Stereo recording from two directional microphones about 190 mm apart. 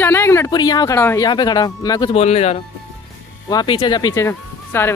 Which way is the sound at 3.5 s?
25° left (ahead or behind).